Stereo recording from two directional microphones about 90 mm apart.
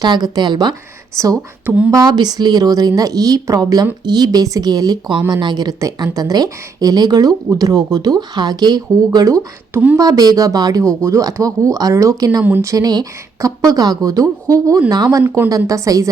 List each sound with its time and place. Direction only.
0.0 s speech: 50° right (ahead or behind)
1.1 s speech: 35° right (ahead or behind)
1.4 s speech: 15° right (ahead or behind)
1.9 s speech: 40° right (ahead or behind)
2.1 s speech: 50° right (ahead or behind)
9.1 s speech: 40° right (ahead or behind)
12.4 s speech: 20° right (ahead or behind)
12.6 s speech: 45° right (ahead or behind)